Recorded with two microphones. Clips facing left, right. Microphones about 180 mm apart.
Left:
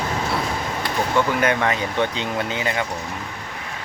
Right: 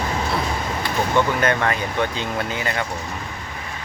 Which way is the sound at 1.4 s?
15° left (ahead or behind).